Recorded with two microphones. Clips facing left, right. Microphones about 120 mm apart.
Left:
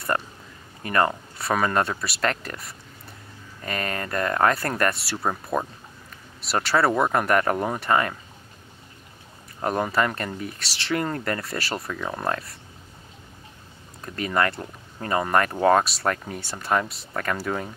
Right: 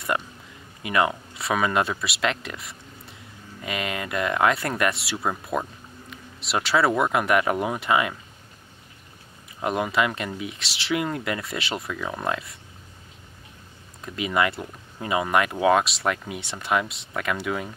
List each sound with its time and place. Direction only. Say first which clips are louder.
0.1 s speech: left 1 dB; 5° right (ahead or behind)
6.7 s speech: even; centre (ahead or behind)
9.6 s speech: even; 10° right (ahead or behind)
14.0 s speech: even; 10° right (ahead or behind)